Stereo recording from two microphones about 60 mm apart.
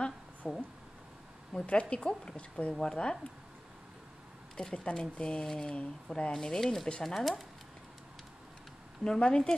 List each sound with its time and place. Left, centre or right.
0.0 s a sound: centre
1.5 s a woman's voice: centre
4.6 s speech: centre
9.0 s speech: centre